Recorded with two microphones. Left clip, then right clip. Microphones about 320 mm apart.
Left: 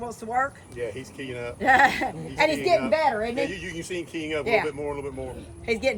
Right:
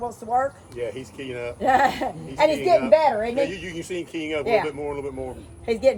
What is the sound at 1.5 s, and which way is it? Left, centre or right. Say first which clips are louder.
Speech: left 1 dB; centre.